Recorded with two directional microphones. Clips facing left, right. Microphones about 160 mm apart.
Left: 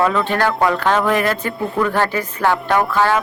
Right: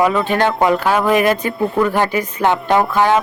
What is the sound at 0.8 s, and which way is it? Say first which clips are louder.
Speech: right 2 dB; 10° right (ahead or behind).